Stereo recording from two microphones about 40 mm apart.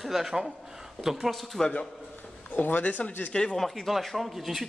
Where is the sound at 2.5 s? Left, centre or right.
Left.